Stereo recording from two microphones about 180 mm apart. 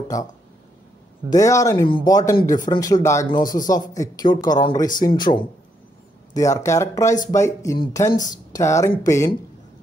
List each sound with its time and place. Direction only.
0.1 s speech: 20° left (ahead or behind)
1.3 s speech: 20° left (ahead or behind)
8.1 s speech: 45° left (ahead or behind)
8.5 s speech: 15° left (ahead or behind)